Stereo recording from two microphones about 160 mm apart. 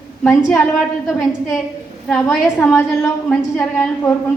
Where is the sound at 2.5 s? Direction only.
15° left (ahead or behind).